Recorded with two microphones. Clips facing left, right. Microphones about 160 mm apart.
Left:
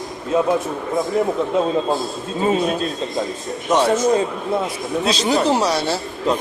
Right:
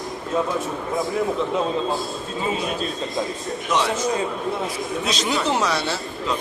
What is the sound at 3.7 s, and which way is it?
Speech, 45° left (ahead or behind).